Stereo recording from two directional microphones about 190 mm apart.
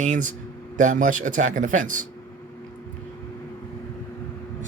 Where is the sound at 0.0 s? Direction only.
40° right (ahead or behind).